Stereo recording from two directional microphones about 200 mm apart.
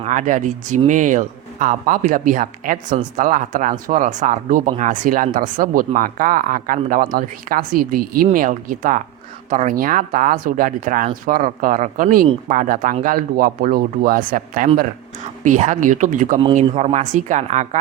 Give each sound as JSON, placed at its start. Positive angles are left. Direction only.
{"t": 0.0, "sound": "a man's voice", "side_deg": -40}